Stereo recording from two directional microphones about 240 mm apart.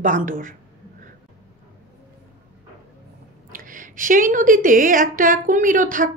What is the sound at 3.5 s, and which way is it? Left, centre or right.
A woman's voice, right.